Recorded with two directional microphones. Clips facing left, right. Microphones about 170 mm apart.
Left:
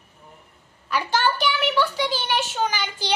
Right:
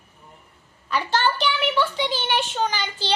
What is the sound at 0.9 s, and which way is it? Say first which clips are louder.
A child's voice: even; 10° left (ahead or behind).